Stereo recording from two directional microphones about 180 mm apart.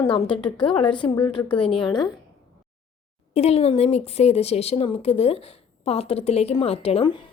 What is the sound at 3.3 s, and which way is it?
A woman's voice, 35° left (ahead or behind).